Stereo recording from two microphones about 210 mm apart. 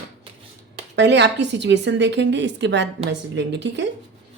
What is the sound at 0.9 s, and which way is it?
A woman's voice, 55° right (ahead or behind).